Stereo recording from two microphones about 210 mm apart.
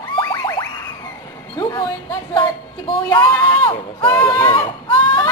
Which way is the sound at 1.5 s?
20° left (ahead or behind).